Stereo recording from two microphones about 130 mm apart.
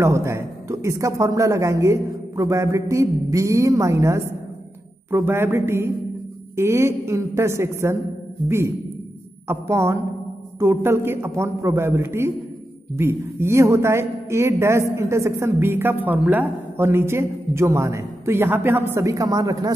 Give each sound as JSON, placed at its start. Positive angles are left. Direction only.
{"t": 0.0, "sound": "a man's voice", "side_deg": -20}